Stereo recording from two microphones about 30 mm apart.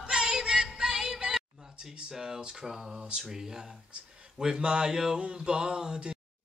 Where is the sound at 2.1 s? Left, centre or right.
Right.